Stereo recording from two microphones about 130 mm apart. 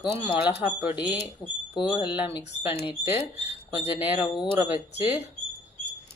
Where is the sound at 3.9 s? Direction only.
10° right (ahead or behind).